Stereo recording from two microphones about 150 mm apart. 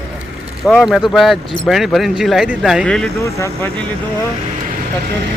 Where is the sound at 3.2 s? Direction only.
20° left (ahead or behind).